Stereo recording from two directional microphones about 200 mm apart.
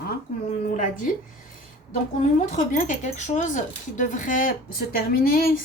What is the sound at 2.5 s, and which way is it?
Speech, 40° left (ahead or behind).